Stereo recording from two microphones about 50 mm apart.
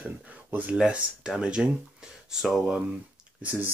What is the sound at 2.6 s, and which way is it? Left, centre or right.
Speech, right.